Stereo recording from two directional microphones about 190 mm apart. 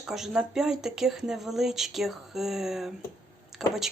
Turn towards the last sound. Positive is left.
turn(degrees=0)  # may be behind; listen again after turning